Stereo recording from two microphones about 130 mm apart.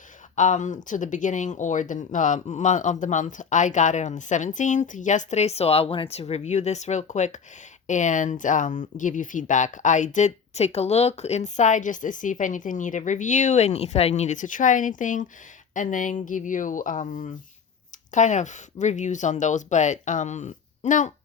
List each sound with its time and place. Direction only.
0.3 s speech: 75° left (ahead or behind)
18.1 s speech: 70° left (ahead or behind)